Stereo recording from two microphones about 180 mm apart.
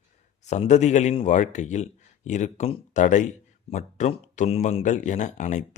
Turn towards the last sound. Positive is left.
turn(degrees=40)  # may be behind; listen again after turning